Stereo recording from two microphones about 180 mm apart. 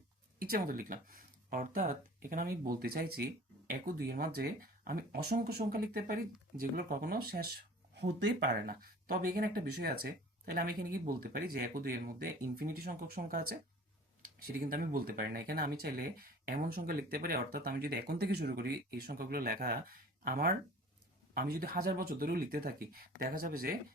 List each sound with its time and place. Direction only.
0.3 s speech: 55° right (ahead or behind)